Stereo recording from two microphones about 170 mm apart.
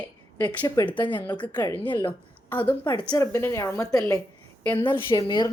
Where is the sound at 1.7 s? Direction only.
10° left (ahead or behind).